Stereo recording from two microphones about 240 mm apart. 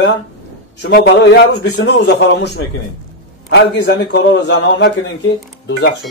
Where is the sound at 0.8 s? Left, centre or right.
Left.